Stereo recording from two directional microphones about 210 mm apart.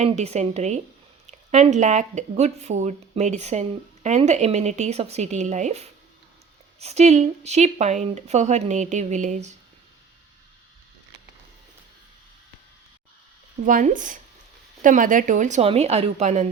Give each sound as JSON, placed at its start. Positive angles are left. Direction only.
{"t": 0.0, "sound": "speech", "side_deg": -30}
{"t": 13.7, "sound": "speech", "side_deg": -40}